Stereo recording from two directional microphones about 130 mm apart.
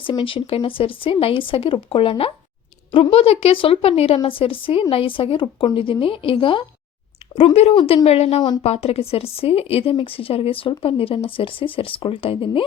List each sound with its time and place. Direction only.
0.0 s speech: 40° left (ahead or behind)
7.3 s speech: 55° left (ahead or behind)